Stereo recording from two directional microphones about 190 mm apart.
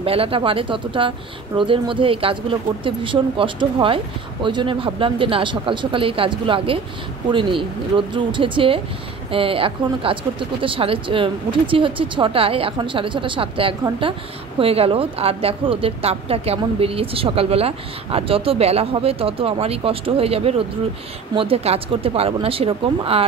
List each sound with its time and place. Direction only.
0.0 s a woman's voice: 30° right (ahead or behind)